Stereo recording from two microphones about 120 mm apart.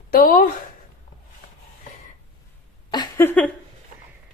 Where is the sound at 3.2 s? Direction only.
15° left (ahead or behind).